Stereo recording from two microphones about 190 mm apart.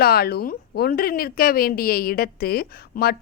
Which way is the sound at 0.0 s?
55° left (ahead or behind).